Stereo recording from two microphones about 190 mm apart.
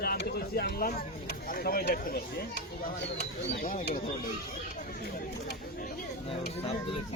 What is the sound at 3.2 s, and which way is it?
Speech, 45° left (ahead or behind).